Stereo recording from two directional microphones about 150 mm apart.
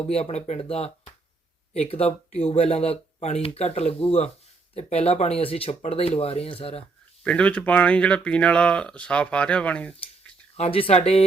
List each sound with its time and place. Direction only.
0.0 s speech: 45° left (ahead or behind)
7.3 s speech: 10° left (ahead or behind)
10.6 s speech: 40° left (ahead or behind)